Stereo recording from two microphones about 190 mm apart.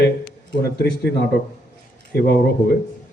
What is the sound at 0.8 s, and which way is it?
Speech, 60° left (ahead or behind).